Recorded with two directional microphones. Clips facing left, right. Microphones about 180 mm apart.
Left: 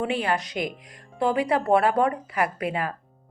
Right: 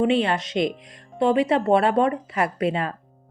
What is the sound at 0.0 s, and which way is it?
Speech, 25° right (ahead or behind).